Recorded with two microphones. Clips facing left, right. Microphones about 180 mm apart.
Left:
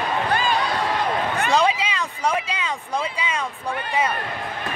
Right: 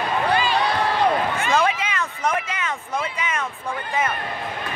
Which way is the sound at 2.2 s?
10° left (ahead or behind).